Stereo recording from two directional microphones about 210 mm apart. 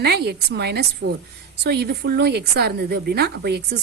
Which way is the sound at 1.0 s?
70° right (ahead or behind).